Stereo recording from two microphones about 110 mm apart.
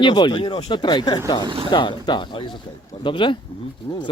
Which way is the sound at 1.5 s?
55° right (ahead or behind).